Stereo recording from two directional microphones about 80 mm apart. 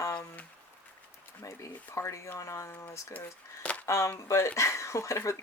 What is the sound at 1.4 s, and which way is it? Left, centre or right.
Speech, left.